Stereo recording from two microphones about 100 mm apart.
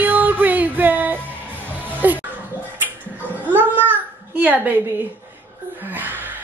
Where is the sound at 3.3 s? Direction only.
20° right (ahead or behind).